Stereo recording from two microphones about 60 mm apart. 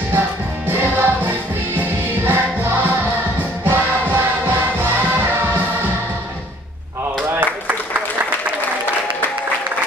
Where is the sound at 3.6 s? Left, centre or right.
Right.